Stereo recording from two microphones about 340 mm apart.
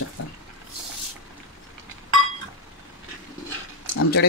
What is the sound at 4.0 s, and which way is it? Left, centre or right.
Speech, left.